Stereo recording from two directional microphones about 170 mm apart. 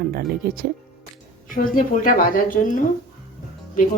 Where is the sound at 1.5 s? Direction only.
55° left (ahead or behind).